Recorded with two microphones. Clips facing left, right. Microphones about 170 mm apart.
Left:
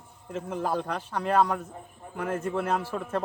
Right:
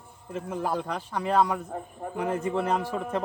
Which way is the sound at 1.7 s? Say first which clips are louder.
Right 9 dB; 60° right (ahead or behind).